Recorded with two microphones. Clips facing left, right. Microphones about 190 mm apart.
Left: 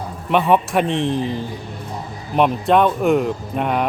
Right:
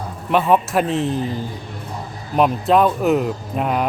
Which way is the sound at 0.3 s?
Centre (ahead or behind).